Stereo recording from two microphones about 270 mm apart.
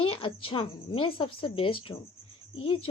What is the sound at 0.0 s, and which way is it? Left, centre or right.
A woman's voice, centre.